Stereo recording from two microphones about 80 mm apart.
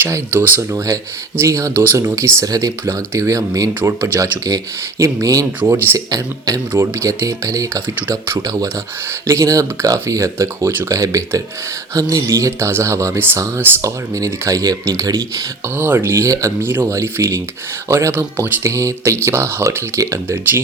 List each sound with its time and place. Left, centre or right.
0.3 s speech: right
1.4 s speech: right
1.7 s speech: right
2.4 s speech: right
2.8 s speech: right
13.8 s speech: right
15.8 s speech: right
16.1 s speech: right
16.6 s speech: right